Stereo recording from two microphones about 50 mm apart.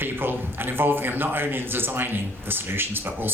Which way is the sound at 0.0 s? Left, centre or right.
Right.